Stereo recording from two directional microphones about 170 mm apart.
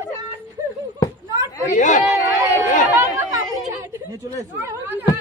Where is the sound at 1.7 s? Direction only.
45° left (ahead or behind).